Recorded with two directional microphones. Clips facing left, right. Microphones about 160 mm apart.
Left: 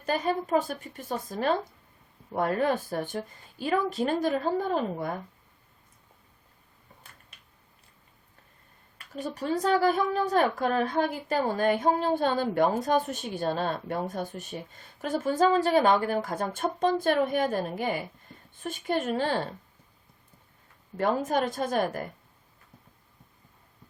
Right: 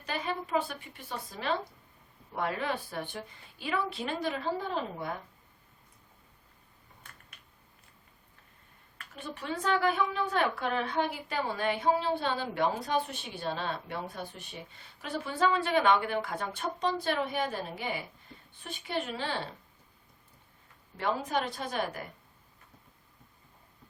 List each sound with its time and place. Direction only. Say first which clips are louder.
0.0 s a woman's voice: left 7 dB; 45° left (ahead or behind)
9.0 s a woman's voice: left 8 dB; 40° left (ahead or behind)
20.9 s a woman's voice: left 5 dB; 45° left (ahead or behind)